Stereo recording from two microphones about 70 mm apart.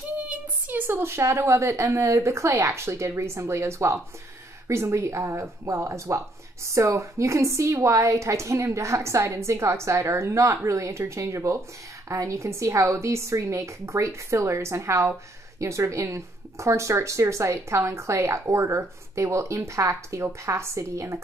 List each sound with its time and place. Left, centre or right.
0.2 s a woman's voice: right